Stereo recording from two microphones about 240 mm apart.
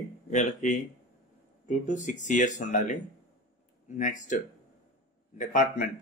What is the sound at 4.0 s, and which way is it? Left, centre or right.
Speech, left.